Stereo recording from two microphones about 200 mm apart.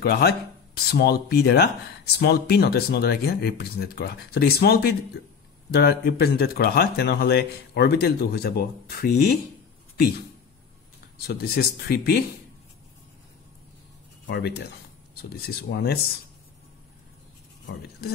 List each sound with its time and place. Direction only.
0.0 s speech: 55° left (ahead or behind)
11.1 s speech: 50° left (ahead or behind)
14.2 s speech: 55° left (ahead or behind)